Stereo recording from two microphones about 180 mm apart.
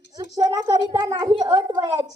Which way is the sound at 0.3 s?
20° right (ahead or behind).